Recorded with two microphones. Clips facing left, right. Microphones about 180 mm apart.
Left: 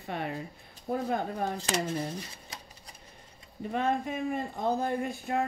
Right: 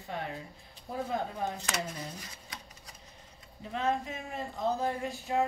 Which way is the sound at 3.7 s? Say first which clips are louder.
Left 2 dB; 55° left (ahead or behind).